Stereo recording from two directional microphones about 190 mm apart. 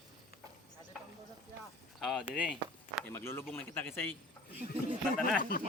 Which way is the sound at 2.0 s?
Centre (ahead or behind).